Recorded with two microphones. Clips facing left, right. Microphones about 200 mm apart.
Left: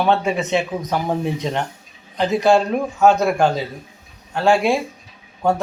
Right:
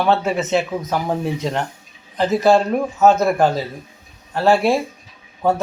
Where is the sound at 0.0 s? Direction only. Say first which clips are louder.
Even; centre (ahead or behind).